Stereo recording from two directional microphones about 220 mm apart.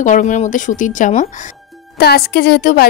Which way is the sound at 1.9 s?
45° left (ahead or behind).